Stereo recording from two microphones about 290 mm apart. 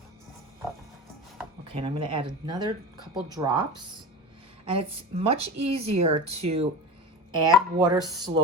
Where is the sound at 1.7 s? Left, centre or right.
Centre.